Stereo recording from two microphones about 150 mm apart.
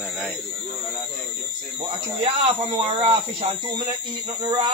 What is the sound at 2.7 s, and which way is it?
Speech, 40° right (ahead or behind).